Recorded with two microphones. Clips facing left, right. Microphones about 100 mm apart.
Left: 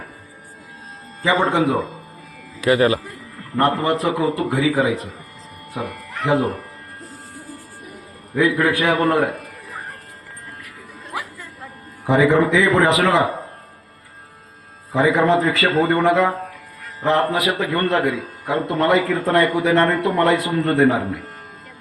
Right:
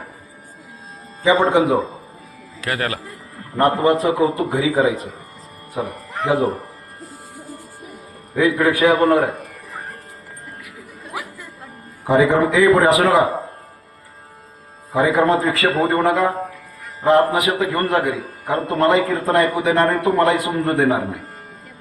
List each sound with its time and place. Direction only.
1.2 s a man's voice: 15° right (ahead or behind)
2.6 s a man's voice: 5° left (ahead or behind)
3.6 s a man's voice: 15° right (ahead or behind)
8.4 s a man's voice: 15° right (ahead or behind)
11.0 s chatter: 15° right (ahead or behind)
12.0 s a man's voice: 15° right (ahead or behind)
14.9 s a man's voice: 15° right (ahead or behind)